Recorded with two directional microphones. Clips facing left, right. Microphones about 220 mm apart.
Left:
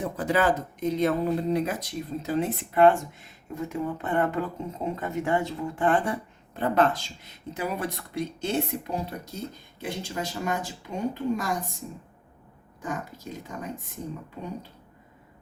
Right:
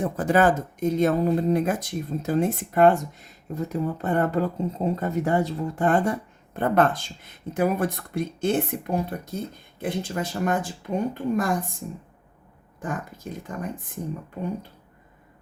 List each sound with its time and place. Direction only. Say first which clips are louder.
0.0 s speech: right 4 dB; 50° right (ahead or behind)
13.5 s speech: right 5 dB; 55° right (ahead or behind)